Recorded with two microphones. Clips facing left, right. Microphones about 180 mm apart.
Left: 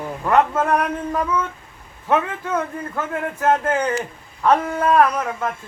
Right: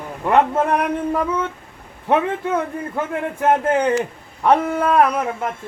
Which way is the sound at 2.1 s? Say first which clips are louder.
Right 2 dB; 20° right (ahead or behind).